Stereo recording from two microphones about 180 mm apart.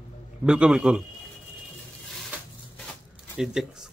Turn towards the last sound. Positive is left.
turn(degrees=-5)  # may be behind; listen again after turning